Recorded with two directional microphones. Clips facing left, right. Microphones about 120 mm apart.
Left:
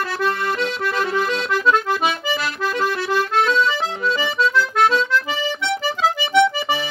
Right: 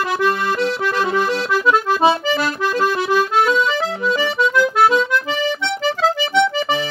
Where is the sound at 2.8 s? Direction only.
15° right (ahead or behind).